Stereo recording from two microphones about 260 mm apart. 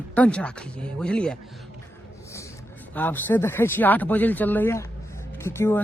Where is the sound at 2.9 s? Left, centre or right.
Centre.